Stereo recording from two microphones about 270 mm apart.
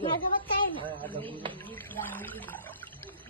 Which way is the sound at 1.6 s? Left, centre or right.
Centre.